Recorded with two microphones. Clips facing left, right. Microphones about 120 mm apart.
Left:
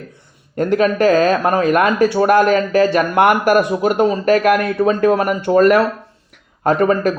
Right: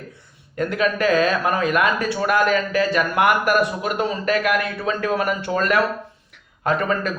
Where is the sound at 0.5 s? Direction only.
40° left (ahead or behind).